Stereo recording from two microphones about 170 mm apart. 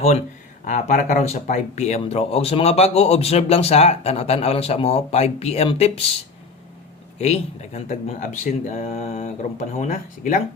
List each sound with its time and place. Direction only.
0.6 s speech: 45° left (ahead or behind)
7.2 s speech: 40° left (ahead or behind)
9.2 s speech: 50° left (ahead or behind)